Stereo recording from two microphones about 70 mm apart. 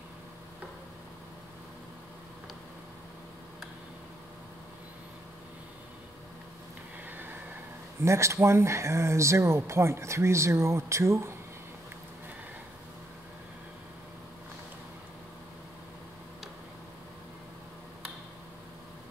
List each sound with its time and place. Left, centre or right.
8.0 s speech: right